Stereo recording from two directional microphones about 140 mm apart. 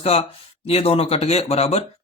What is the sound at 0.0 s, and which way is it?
Speech, 45° left (ahead or behind).